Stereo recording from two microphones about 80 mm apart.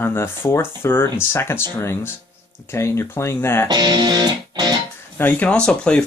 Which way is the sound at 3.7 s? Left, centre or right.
Right.